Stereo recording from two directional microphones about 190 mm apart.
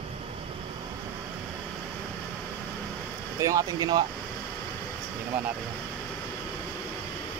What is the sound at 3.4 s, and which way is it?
Speech, 15° right (ahead or behind).